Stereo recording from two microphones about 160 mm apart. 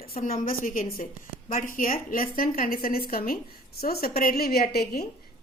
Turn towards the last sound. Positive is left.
turn(degrees=75)  # may be behind; listen again after turning